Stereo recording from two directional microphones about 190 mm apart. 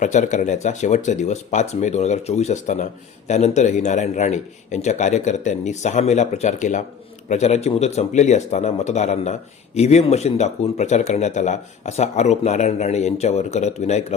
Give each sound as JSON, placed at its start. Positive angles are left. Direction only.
{"t": 0.0, "sound": "speech", "side_deg": 40}